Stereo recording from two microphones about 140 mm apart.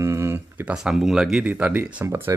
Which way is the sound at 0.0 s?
20° right (ahead or behind).